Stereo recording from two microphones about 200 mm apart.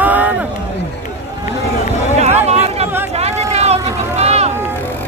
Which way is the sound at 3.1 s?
30° right (ahead or behind).